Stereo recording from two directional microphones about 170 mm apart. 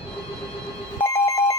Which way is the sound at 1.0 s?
15° left (ahead or behind).